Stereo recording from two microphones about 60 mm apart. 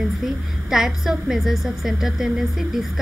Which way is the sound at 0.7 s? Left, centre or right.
Centre.